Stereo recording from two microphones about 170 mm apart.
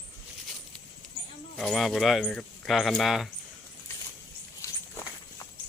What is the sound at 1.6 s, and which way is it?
Speech, centre (ahead or behind).